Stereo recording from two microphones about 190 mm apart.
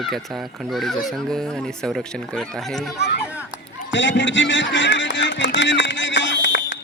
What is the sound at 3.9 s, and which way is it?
Music, 70° left (ahead or behind).